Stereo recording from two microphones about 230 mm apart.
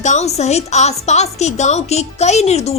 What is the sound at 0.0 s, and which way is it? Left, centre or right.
A woman's voice, left.